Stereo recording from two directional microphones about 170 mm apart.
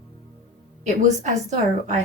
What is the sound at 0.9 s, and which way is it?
Speech, 45° right (ahead or behind).